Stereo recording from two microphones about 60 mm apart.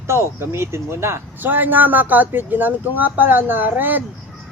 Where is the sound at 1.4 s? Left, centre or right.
Right.